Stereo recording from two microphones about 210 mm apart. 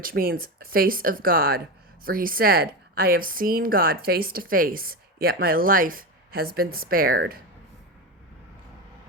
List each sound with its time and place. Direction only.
0.0 s speech: 45° right (ahead or behind)